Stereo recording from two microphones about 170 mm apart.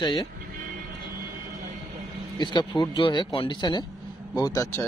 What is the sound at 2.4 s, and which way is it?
A man's voice, 25° left (ahead or behind).